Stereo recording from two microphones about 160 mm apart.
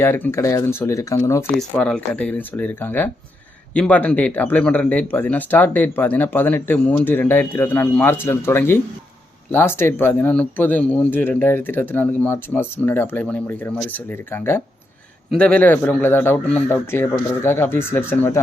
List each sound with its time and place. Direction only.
0.0 s speech: 15° left (ahead or behind)
1.5 s speech: 5° left (ahead or behind)